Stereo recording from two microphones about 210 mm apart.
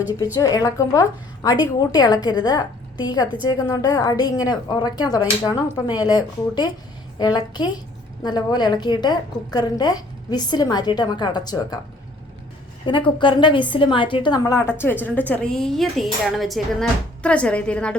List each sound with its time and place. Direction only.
0.3 s a woman's voice: 15° left (ahead or behind)
12.8 s a woman's voice: 25° left (ahead or behind); by 17.9 s 5° left (ahead or behind)